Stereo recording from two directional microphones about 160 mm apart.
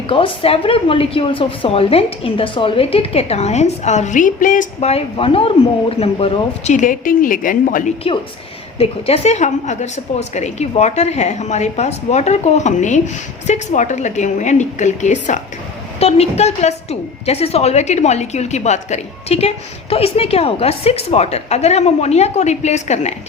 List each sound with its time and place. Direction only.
0.1 s a woman's voice: 35° left (ahead or behind)
6.7 s a woman's voice: 55° left (ahead or behind)
8.8 s a woman's voice: 40° left (ahead or behind)